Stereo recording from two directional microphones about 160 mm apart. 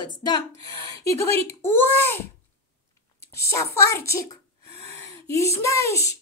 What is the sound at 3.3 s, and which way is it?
A child's voice, 20° left (ahead or behind).